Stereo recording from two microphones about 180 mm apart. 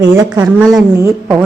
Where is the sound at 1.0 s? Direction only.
15° right (ahead or behind).